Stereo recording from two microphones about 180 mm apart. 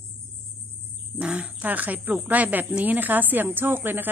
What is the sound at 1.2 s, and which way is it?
Speech, 5° right (ahead or behind).